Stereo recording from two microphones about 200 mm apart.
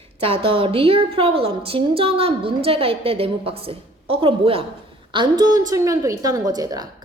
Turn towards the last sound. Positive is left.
turn(degrees=-20)  # may be behind; listen again after turning